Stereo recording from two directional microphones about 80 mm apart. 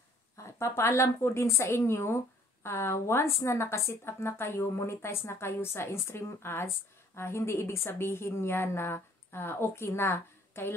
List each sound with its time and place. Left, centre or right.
0.4 s speech: left